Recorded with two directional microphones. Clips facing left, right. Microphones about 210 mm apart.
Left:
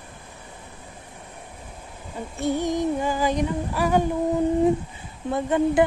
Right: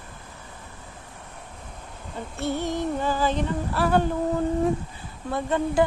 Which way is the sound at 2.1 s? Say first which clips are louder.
Left 3 dB; 15° left (ahead or behind).